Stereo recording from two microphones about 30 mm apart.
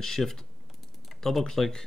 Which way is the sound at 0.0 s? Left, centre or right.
Centre.